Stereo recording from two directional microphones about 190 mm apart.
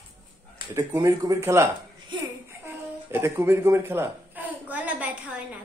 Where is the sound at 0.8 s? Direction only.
20° right (ahead or behind).